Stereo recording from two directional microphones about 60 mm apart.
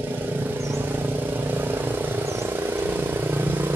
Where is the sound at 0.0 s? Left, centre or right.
Right.